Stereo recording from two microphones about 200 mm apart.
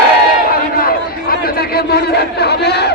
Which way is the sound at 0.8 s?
50° left (ahead or behind).